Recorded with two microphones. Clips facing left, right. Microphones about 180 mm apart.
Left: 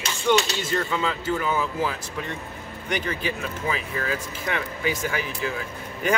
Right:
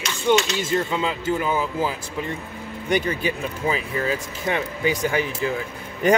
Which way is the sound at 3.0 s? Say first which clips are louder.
Right 3 dB; 20° right (ahead or behind).